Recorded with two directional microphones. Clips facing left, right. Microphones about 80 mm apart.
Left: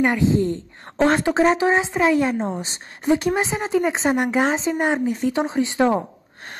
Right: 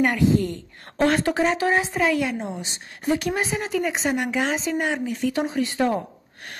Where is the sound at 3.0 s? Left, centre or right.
Left.